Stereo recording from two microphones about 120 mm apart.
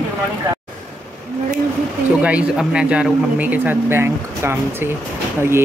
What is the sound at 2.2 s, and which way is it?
Speech, 10° right (ahead or behind).